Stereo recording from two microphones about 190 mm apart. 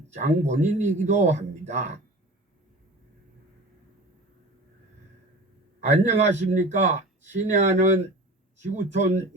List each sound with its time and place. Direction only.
0.1 s speech: 40° right (ahead or behind)
5.8 s speech: 35° right (ahead or behind)